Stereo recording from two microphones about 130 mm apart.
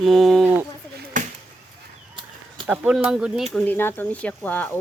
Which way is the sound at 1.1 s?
85° right.